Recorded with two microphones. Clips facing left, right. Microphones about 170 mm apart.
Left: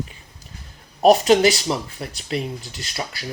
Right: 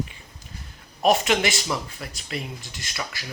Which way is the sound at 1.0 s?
35° left (ahead or behind).